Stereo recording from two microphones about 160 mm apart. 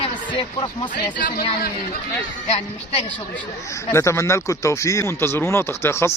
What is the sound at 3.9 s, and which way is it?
Speech, 15° left (ahead or behind).